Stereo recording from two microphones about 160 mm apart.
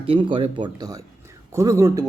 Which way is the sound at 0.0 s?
35° right (ahead or behind).